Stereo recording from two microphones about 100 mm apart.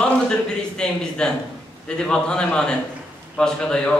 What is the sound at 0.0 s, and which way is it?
A man's voice, 10° left (ahead or behind).